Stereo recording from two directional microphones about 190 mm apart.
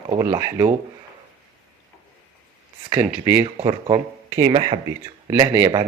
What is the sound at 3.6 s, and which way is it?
Speech, 30° right (ahead or behind).